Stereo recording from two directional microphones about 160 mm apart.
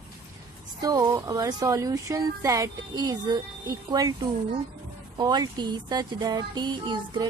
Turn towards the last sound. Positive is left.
turn(degrees=-30)  # may be behind; listen again after turning